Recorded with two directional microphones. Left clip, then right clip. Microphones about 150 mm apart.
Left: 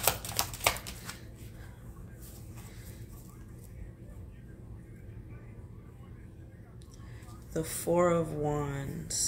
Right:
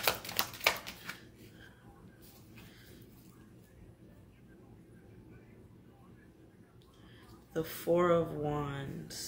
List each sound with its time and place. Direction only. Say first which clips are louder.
0.0 s shuffling cards: left 1 dB; 55° left (ahead or behind)
7.5 s speech: left 2 dB; 15° left (ahead or behind)